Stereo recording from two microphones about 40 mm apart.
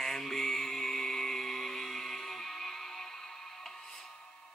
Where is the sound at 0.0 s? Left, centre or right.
Centre.